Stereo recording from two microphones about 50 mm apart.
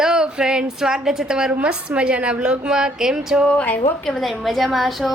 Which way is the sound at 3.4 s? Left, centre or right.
Left.